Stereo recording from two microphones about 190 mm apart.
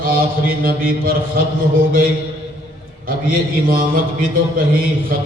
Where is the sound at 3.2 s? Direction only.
50° right (ahead or behind).